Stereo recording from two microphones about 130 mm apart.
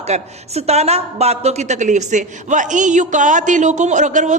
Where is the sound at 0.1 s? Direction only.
55° right (ahead or behind).